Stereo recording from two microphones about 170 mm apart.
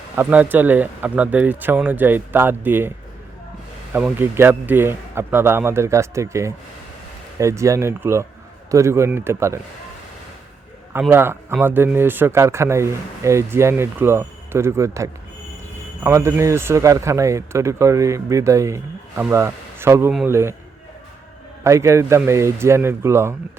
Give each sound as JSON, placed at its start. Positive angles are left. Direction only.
{"t": 0.2, "sound": "speech", "side_deg": -10}
{"t": 3.9, "sound": "speech", "side_deg": -10}
{"t": 11.1, "sound": "speech", "side_deg": -15}
{"t": 21.6, "sound": "speech", "side_deg": -15}